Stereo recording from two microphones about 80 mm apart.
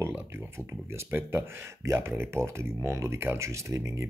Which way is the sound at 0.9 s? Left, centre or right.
Right.